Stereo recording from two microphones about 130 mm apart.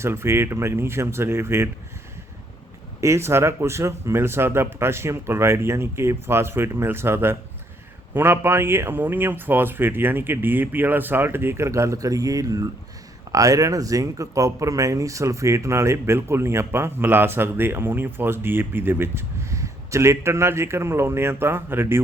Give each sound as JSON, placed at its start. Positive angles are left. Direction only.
{"t": 0.0, "sound": "speech", "side_deg": -20}
{"t": 3.0, "sound": "a man's voice", "side_deg": -20}